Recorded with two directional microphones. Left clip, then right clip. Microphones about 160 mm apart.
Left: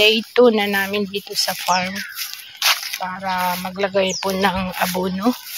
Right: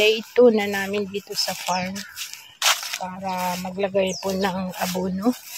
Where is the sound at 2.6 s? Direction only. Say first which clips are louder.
Left 3 dB; 15° left (ahead or behind).